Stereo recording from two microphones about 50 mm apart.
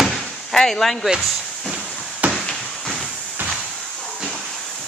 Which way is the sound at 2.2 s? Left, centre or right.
Right.